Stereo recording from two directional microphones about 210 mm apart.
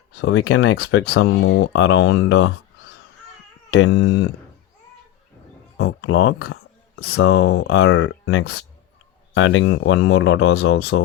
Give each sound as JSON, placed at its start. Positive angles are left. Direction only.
{"t": 0.2, "sound": "speech", "side_deg": 65}
{"t": 5.7, "sound": "a sound", "side_deg": 70}
{"t": 7.0, "sound": "speech", "side_deg": 65}
{"t": 10.6, "sound": "speech", "side_deg": 80}